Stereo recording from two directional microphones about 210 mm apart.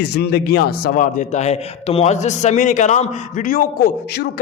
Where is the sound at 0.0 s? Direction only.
50° left (ahead or behind).